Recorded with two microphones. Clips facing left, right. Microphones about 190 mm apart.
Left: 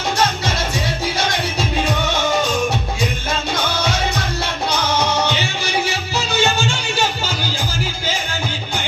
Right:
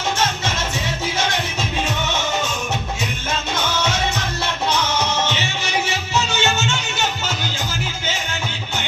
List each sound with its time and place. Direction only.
3.5 s music: 35° left (ahead or behind)